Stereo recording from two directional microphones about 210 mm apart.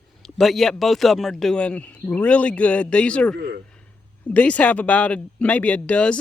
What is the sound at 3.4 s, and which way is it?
Speech, 45° right (ahead or behind).